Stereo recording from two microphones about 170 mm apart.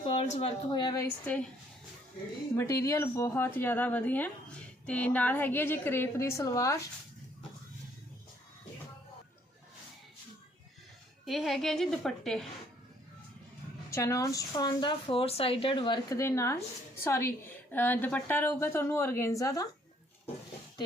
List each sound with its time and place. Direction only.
0.0 s a sound: 35° left (ahead or behind)
0.7 s speech: 25° left (ahead or behind)
1.2 s speech: 10° left (ahead or behind)
2.6 s speech: 15° left (ahead or behind)
11.3 s a woman's voice: centre (ahead or behind)
13.9 s speech: 20° left (ahead or behind)